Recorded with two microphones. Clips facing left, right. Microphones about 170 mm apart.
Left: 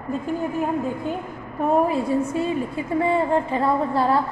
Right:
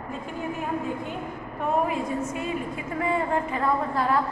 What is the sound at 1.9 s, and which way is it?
A woman's voice, 30° left (ahead or behind).